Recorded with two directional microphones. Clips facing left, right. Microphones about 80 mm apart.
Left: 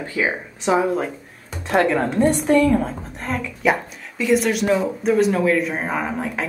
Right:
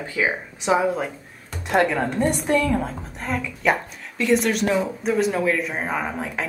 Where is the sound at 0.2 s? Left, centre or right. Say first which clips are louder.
Left 1 dB; centre.